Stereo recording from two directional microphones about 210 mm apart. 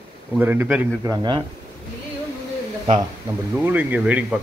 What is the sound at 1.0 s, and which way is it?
Speech, 20° right (ahead or behind).